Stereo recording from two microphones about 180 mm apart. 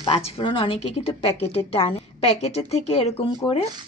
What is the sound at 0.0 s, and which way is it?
A woman's voice, 30° left (ahead or behind).